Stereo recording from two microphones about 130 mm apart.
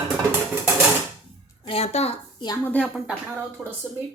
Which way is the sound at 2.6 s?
10° left (ahead or behind).